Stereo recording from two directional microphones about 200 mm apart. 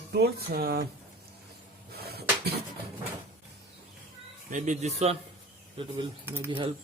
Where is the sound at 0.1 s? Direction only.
50° right (ahead or behind).